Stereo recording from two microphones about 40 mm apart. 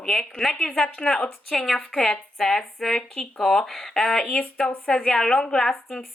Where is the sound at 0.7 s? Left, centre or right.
Left.